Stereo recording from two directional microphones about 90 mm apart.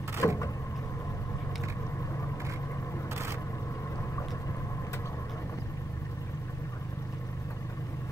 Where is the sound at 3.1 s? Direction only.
30° right (ahead or behind).